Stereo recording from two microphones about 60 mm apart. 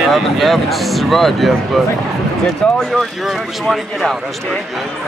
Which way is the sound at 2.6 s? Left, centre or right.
Centre.